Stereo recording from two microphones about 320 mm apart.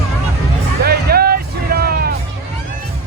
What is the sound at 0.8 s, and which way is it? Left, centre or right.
Music, right.